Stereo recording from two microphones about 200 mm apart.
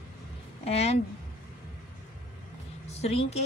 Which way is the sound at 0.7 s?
30° left (ahead or behind).